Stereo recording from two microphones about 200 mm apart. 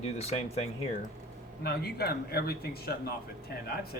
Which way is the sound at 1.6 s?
50° left (ahead or behind).